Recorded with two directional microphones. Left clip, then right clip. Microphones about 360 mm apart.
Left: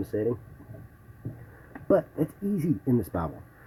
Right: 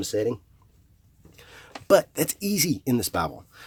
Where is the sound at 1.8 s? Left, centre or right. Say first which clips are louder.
Right 5 dB; right.